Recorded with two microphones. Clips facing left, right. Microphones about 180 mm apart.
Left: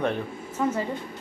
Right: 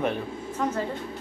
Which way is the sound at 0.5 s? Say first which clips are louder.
Left 2 dB; 10° left (ahead or behind).